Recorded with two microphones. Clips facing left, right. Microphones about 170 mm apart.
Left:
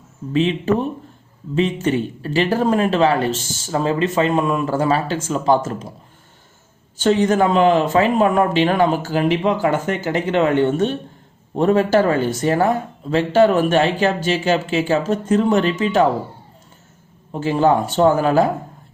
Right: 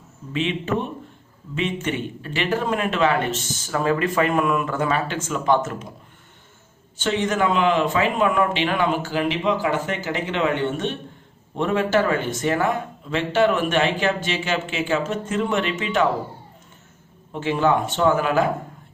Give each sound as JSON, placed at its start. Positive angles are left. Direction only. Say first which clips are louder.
{"t": 0.3, "sound": "speech", "louder": "left 6 dB", "side_deg": 35}
{"t": 7.0, "sound": "speech", "louder": "left 6 dB", "side_deg": 40}
{"t": 17.3, "sound": "speech", "louder": "left 4 dB", "side_deg": 35}